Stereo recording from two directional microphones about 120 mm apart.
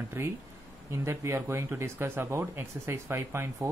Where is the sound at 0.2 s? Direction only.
20° right (ahead or behind).